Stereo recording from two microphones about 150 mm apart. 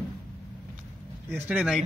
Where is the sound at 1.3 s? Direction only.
10° right (ahead or behind).